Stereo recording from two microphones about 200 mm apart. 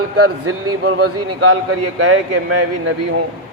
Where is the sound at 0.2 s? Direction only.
90° right.